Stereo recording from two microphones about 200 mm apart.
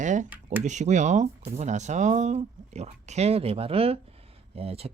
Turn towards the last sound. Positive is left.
turn(degrees=-30)  # may be behind; listen again after turning